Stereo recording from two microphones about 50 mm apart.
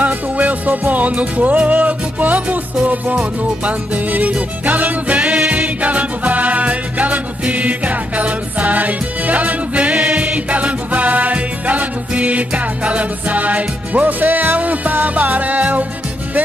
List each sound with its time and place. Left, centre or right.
0.0 s music: right